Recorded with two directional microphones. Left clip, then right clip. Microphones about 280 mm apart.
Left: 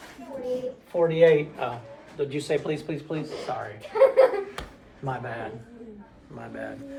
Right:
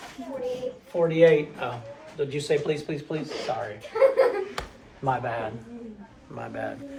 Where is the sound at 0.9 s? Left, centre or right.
Left.